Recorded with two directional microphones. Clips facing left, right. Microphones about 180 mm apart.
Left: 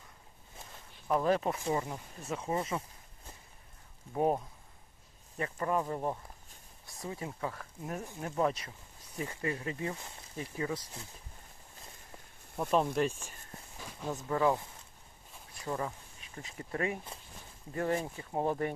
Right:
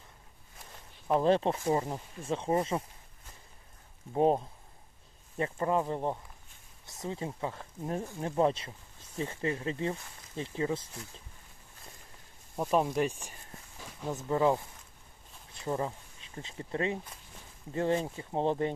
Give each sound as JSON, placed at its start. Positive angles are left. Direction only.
{"t": 1.0, "sound": "speech", "side_deg": -30}
{"t": 4.1, "sound": "speech", "side_deg": -25}
{"t": 13.0, "sound": "speech", "side_deg": -15}